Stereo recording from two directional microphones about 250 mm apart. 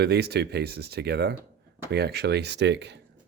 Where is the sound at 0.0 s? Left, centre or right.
Right.